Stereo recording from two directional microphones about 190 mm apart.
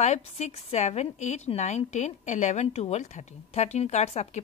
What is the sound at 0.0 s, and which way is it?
A woman's voice, 35° left (ahead or behind).